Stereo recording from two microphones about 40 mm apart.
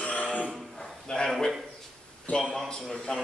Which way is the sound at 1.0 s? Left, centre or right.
Centre.